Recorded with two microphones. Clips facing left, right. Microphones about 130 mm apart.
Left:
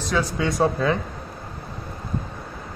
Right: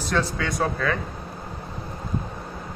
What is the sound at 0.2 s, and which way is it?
Speech, 25° left (ahead or behind).